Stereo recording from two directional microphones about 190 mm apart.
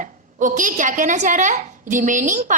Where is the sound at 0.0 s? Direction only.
45° right (ahead or behind).